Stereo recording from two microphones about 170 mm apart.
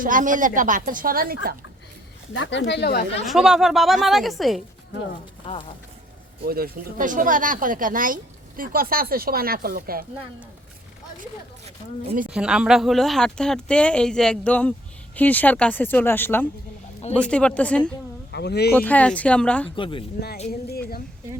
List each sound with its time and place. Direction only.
0.0 s speech: 50° right (ahead or behind)
2.3 s speech: 90° left
3.2 s speech: 5° right (ahead or behind)
5.5 s speech: 35° left (ahead or behind)
6.4 s speech: 60° right (ahead or behind)
11.2 s a woman's voice: 45° right (ahead or behind)
12.3 s speech: 5° right (ahead or behind)
18.3 s speech: 75° left (ahead or behind)
18.8 s speech: 10° left (ahead or behind)
19.7 s speech: 30° left (ahead or behind)
20.5 s speech: 65° left (ahead or behind)